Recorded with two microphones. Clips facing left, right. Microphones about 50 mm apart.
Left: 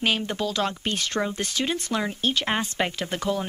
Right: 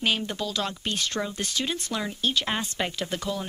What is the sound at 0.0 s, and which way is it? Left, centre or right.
Speech, left.